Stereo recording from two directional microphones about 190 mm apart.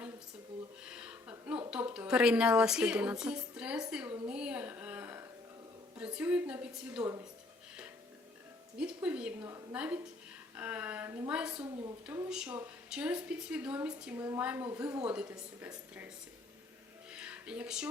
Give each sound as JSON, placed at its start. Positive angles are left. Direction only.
{"t": 0.9, "sound": "a sound", "side_deg": -5}
{"t": 6.0, "sound": "a woman's voice", "side_deg": -5}
{"t": 8.8, "sound": "a woman's voice", "side_deg": -5}
{"t": 11.6, "sound": "a woman's voice", "side_deg": -20}
{"t": 12.0, "sound": "a woman's voice", "side_deg": -5}
{"t": 17.1, "sound": "music", "side_deg": -5}